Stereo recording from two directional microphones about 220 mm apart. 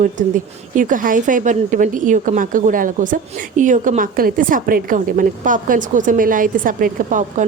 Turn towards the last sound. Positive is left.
turn(degrees=-35)  # may be behind; listen again after turning